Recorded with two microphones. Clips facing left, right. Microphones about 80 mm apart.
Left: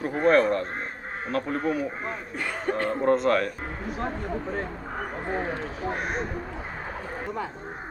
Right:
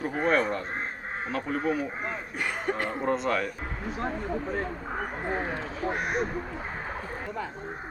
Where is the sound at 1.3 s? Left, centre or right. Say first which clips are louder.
Left 2 dB; centre.